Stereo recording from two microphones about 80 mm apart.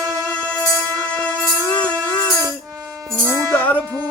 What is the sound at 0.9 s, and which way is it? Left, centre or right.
Music, centre.